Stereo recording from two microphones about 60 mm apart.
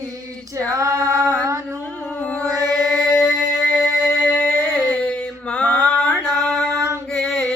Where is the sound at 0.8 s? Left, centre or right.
Right.